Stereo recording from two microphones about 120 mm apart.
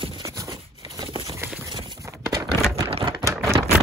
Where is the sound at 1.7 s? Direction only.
40° right (ahead or behind).